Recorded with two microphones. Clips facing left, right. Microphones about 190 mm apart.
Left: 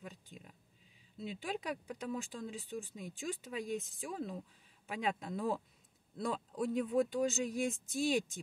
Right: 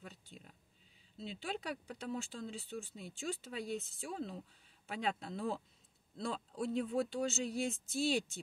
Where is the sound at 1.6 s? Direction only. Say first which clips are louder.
Left 2 dB; 35° right (ahead or behind).